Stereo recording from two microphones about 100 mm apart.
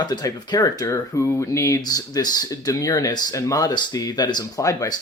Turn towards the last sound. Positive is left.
turn(degrees=35)  # may be behind; listen again after turning